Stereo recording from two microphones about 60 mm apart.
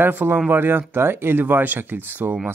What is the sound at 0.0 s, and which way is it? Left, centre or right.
Speech, right.